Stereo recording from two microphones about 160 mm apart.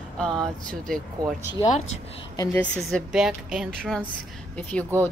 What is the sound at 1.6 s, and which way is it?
Speech, 45° left (ahead or behind).